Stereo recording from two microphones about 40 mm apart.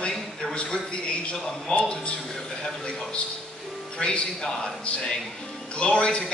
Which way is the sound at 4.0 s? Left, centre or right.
Left.